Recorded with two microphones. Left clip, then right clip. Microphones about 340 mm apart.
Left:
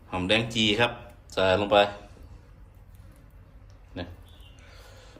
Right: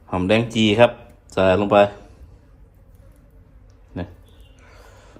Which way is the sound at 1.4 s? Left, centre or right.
Right.